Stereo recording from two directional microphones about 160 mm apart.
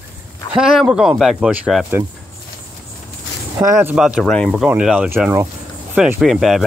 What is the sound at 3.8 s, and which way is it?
Speech, 5° right (ahead or behind).